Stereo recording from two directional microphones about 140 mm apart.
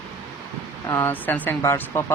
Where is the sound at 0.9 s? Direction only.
10° left (ahead or behind).